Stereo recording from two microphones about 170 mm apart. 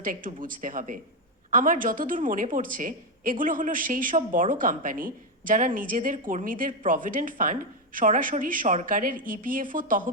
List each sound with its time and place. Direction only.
0.0 s speech: 50° right (ahead or behind)